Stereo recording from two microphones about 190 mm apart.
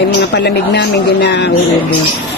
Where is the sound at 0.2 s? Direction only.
65° left (ahead or behind).